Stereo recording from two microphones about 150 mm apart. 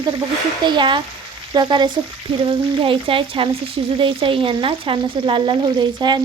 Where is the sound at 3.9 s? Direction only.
35° right (ahead or behind).